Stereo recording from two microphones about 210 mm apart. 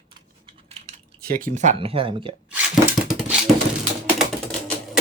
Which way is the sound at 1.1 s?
45° right (ahead or behind).